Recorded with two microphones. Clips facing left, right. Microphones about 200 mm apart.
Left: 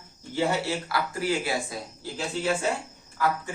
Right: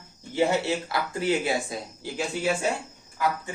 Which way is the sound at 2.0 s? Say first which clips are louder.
Right 1 dB; 15° right (ahead or behind).